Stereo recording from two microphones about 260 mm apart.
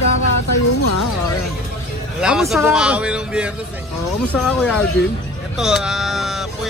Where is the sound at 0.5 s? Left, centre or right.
Left.